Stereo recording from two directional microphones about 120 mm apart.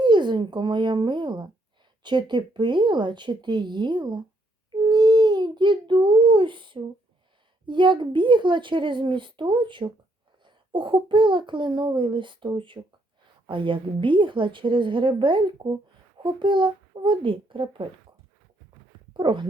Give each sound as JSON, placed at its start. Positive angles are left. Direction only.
{"t": 0.0, "sound": "a child's voice", "side_deg": -40}
{"t": 4.9, "sound": "baby cry", "side_deg": -35}
{"t": 7.7, "sound": "a child's voice", "side_deg": -40}
{"t": 19.1, "sound": "a child's voice", "side_deg": -40}